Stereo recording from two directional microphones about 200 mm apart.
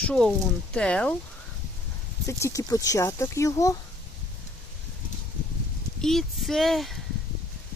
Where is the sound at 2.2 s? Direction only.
15° left (ahead or behind).